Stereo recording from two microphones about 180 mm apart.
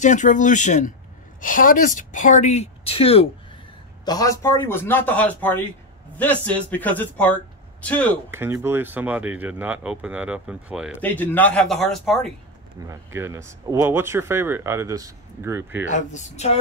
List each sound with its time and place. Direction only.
0.0 s speech: 45° left (ahead or behind)
4.0 s a man's voice: 20° left (ahead or behind)
8.3 s speech: 15° right (ahead or behind)
11.0 s speech: 10° left (ahead or behind)
12.8 s speech: 15° right (ahead or behind)
15.9 s speech: 40° left (ahead or behind)